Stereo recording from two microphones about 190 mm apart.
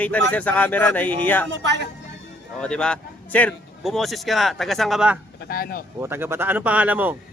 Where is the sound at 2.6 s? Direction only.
5° left (ahead or behind).